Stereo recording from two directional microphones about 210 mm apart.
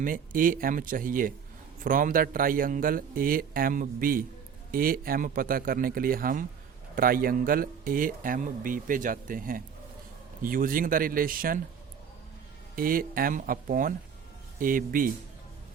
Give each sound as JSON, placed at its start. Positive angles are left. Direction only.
{"t": 0.0, "sound": "a man's voice", "side_deg": -40}
{"t": 12.7, "sound": "a man's voice", "side_deg": -45}